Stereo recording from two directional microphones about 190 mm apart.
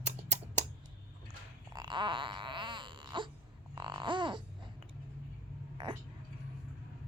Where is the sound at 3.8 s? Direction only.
25° right (ahead or behind).